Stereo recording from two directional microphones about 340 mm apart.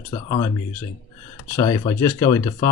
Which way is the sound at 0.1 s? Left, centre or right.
Centre.